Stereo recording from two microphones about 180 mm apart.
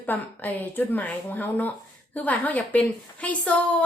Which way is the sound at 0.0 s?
10° left (ahead or behind).